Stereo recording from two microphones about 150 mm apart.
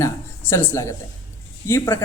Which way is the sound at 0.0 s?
15° left (ahead or behind).